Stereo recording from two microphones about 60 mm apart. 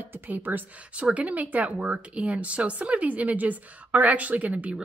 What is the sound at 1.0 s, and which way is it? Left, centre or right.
Speech, right.